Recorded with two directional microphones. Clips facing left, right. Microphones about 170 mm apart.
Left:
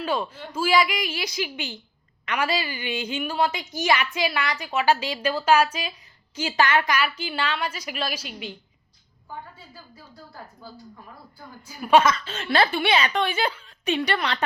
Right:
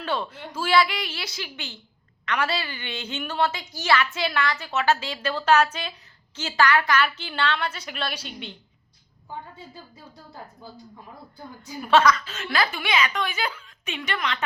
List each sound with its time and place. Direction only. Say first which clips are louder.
0.0 s a woman's voice: left 2 dB; 10° left (ahead or behind)
11.9 s a woman's voice: left 1 dB; 15° left (ahead or behind)
12.1 s speech: left 4 dB; 30° left (ahead or behind)